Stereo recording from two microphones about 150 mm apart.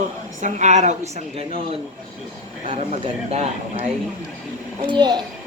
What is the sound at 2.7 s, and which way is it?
Speech, 40° right (ahead or behind).